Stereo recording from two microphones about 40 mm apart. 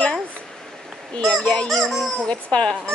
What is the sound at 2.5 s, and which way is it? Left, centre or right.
Speech, left.